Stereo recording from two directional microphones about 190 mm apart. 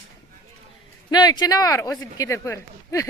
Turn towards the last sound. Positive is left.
turn(degrees=15)  # may be behind; listen again after turning